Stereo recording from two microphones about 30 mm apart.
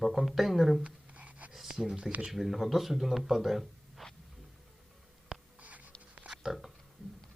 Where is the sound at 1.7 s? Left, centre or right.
Right.